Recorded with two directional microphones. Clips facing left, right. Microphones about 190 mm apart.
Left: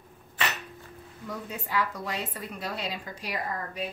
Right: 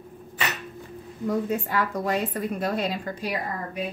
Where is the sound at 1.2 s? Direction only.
50° right (ahead or behind).